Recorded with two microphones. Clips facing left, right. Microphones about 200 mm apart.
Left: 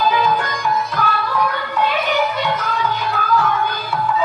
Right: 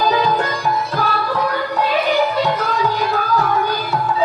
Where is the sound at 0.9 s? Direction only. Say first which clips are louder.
Right 1 dB; 35° right (ahead or behind).